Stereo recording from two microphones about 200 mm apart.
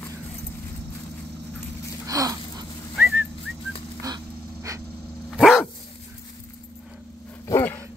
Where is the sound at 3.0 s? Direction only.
5° right (ahead or behind).